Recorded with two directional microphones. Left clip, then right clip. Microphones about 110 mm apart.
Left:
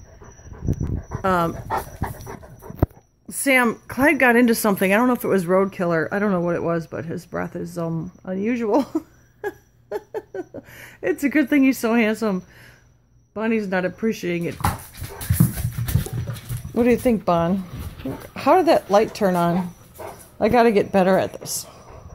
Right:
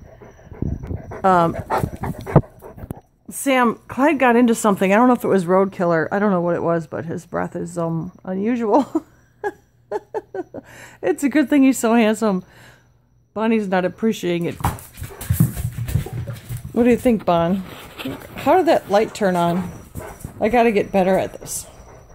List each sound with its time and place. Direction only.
1.2 s speech: 20° right (ahead or behind)
3.4 s speech: 15° right (ahead or behind)
5.3 s speech: centre (ahead or behind); by 14.5 s 25° right (ahead or behind)
15.4 s a sound: 15° right (ahead or behind)
16.7 s speech: 10° right (ahead or behind)